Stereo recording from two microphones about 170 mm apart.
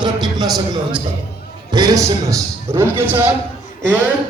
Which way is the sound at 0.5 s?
25° right (ahead or behind).